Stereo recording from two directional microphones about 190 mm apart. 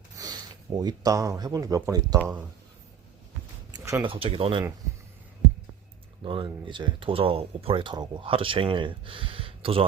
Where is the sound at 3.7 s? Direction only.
15° right (ahead or behind).